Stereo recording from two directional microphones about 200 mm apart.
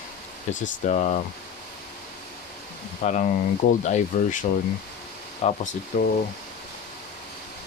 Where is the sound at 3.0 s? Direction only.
35° left (ahead or behind).